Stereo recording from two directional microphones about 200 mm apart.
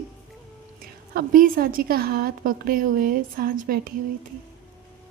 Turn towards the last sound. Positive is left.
turn(degrees=-45)  # may be behind; listen again after turning